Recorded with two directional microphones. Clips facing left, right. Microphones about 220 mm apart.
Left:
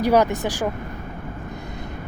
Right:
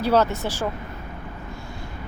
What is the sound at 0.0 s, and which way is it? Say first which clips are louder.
Speech: left 2 dB; 15° left (ahead or behind).